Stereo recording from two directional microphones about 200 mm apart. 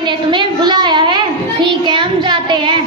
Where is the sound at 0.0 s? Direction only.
25° right (ahead or behind).